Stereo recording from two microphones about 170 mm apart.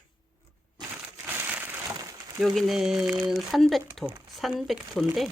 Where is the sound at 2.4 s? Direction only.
Centre (ahead or behind).